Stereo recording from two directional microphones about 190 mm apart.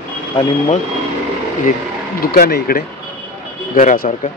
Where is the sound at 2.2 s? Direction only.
50° left (ahead or behind).